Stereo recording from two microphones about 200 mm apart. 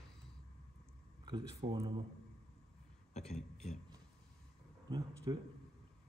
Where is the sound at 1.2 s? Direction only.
20° right (ahead or behind).